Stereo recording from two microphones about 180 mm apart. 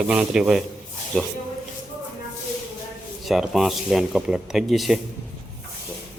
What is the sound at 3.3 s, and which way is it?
Speech, centre (ahead or behind).